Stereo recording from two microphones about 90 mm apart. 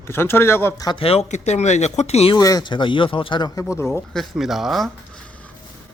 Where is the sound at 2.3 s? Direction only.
40° left (ahead or behind).